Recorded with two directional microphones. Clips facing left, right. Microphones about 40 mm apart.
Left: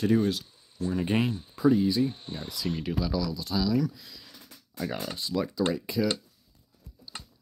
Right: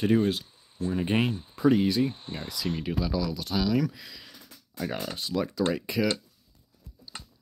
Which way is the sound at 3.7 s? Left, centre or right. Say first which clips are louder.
Right 1 dB; right.